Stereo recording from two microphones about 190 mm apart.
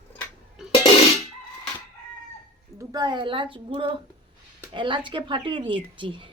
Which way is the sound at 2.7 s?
20° right (ahead or behind).